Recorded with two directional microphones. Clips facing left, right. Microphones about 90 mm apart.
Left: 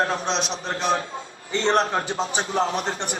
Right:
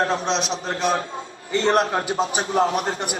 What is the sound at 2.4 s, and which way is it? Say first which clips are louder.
Speech: right 2 dB; 35° right (ahead or behind).